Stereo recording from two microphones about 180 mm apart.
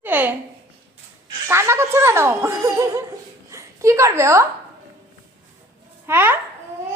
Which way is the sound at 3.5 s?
15° right (ahead or behind).